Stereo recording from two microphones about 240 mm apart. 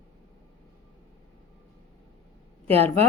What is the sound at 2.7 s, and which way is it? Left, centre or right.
Speech, right.